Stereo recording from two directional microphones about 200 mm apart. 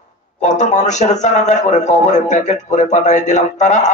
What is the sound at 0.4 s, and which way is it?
A man's voice, 35° left (ahead or behind).